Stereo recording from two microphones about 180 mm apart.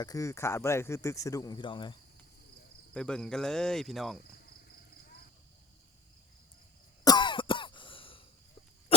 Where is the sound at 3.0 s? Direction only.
5° left (ahead or behind).